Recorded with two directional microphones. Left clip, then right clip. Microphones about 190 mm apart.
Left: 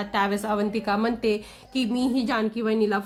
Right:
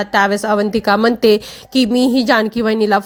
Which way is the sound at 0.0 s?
45° right (ahead or behind).